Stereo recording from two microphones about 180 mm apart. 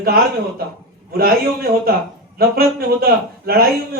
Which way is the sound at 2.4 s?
55° right (ahead or behind).